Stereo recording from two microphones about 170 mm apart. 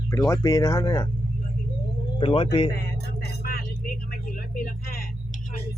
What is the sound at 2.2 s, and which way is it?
Speech, 35° left (ahead or behind).